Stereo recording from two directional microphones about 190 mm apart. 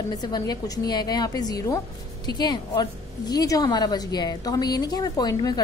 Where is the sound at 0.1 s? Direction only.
20° left (ahead or behind).